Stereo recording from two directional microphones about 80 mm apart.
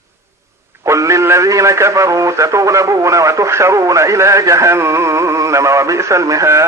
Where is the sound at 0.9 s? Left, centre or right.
Right.